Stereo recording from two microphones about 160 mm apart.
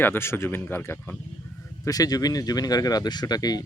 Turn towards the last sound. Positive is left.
turn(degrees=25)  # may be behind; listen again after turning